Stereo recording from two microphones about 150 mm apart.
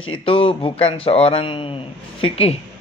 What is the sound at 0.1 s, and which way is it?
Speech, 35° left (ahead or behind).